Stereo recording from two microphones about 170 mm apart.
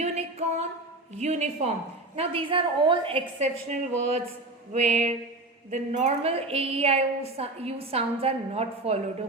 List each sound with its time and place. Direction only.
0.0 s a sound: 40° right (ahead or behind)
1.1 s a woman's voice: 40° right (ahead or behind)
2.1 s a woman's voice: 30° right (ahead or behind)
4.7 s music: 40° right (ahead or behind)
5.7 s a woman's voice: 40° right (ahead or behind)